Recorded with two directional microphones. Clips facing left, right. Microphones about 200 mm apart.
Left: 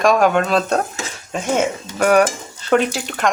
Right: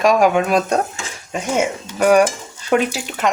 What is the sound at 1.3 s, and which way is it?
Stir, 10° right (ahead or behind).